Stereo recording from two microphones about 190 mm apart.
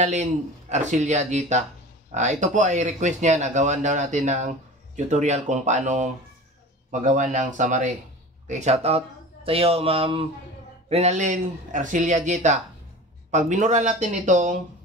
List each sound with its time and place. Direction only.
0.0 s speech: 35° right (ahead or behind)